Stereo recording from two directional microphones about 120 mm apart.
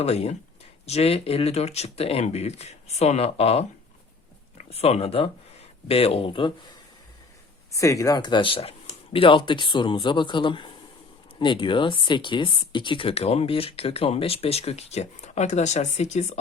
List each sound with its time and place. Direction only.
0.0 s speech: 60° left (ahead or behind)
4.7 s speech: 55° left (ahead or behind)
7.7 s speech: 25° left (ahead or behind); by 16.4 s 70° left (ahead or behind)